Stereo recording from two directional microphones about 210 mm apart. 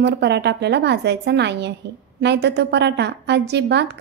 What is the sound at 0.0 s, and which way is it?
A woman's voice, 55° right (ahead or behind).